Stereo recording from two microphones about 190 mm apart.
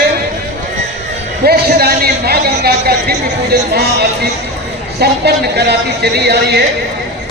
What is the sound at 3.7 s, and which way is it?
Speech, 60° right (ahead or behind).